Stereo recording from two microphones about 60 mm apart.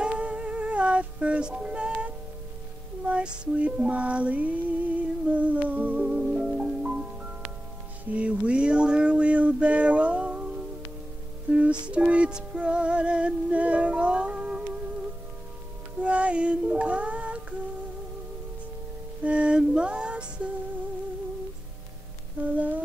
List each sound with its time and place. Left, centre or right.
0.0 s music: centre
3.1 s female singing: right
8.0 s a sound: right
11.5 s music: right
16.0 s music: centre
19.2 s music: centre
22.4 s humming: right